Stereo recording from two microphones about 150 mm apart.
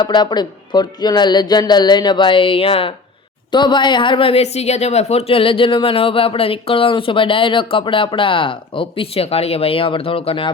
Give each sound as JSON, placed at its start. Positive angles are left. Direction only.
{"t": 0.0, "sound": "a woman's voice", "side_deg": 30}